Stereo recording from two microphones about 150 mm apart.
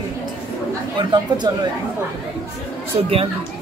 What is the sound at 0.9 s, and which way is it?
Speech, 30° right (ahead or behind).